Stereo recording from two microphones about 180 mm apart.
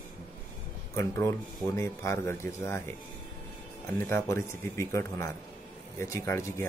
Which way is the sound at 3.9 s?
15° left (ahead or behind).